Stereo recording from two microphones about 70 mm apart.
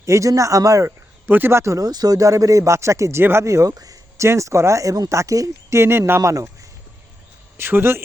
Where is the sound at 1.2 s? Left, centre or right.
Right.